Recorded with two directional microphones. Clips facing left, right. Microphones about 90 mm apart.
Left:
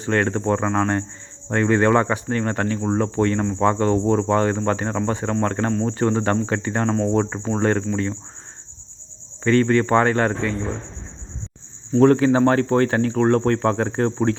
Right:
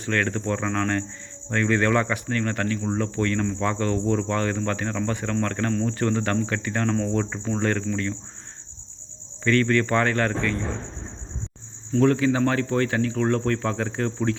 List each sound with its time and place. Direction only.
0.0 s speech: 25° left (ahead or behind)
9.4 s speech: 25° left (ahead or behind)
11.9 s speech: 35° left (ahead or behind)